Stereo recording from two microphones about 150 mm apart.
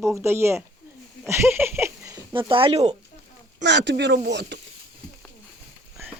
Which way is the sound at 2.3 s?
35° right (ahead or behind).